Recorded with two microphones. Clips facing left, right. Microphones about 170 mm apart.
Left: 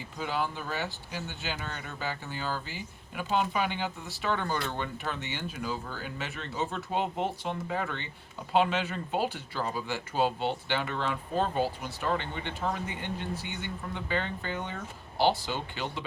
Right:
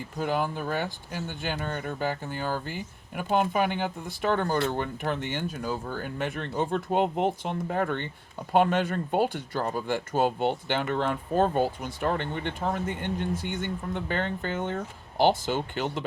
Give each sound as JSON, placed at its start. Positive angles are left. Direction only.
{"t": 0.0, "sound": "speech", "side_deg": -50}